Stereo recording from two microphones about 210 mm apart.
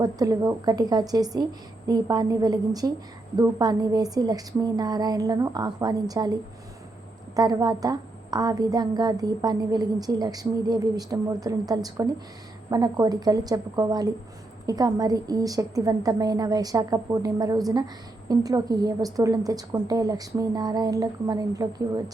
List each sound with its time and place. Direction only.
0.0 s a woman's voice: 15° right (ahead or behind)